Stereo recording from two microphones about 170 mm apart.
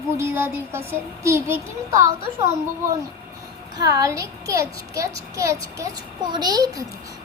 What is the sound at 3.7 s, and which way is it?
A child's voice, 20° right (ahead or behind).